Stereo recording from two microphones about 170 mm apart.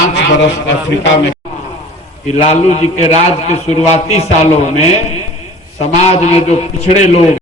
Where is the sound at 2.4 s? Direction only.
45° left (ahead or behind).